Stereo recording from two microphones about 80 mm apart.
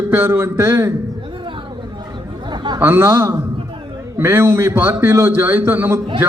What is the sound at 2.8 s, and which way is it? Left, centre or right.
A man's voice, right.